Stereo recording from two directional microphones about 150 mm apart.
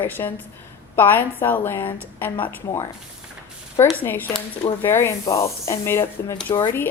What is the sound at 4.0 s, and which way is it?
Speech, 10° left (ahead or behind).